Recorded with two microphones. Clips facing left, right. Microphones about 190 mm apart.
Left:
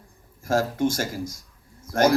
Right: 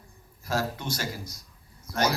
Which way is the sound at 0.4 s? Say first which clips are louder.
Left 8 dB; 50° left (ahead or behind).